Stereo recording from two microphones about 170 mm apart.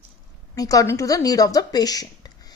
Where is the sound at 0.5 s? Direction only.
20° left (ahead or behind).